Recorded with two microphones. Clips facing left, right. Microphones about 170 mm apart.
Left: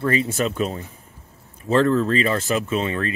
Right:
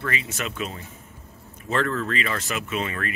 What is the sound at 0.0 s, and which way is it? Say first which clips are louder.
Speech: left 9 dB; 35° left (ahead or behind).